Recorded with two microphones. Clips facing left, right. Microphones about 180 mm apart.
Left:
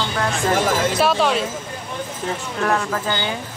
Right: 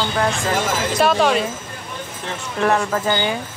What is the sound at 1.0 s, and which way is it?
Speech, centre (ahead or behind).